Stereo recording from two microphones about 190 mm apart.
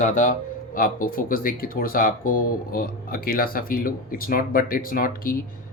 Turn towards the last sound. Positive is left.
turn(degrees=50)  # may be behind; listen again after turning